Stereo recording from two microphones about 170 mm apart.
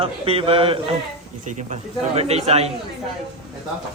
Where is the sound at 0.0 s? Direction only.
35° right (ahead or behind).